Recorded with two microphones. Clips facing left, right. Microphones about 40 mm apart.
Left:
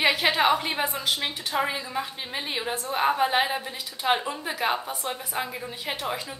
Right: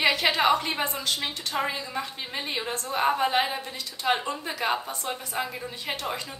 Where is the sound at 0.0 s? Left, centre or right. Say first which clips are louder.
Left 1 dB; centre.